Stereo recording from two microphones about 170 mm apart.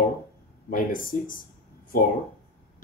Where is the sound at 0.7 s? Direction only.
55° left (ahead or behind).